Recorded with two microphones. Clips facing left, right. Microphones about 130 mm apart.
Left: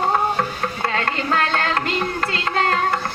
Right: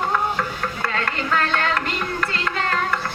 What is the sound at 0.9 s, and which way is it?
Music, 40° left (ahead or behind).